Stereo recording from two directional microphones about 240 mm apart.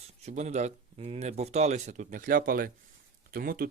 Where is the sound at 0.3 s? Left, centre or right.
Right.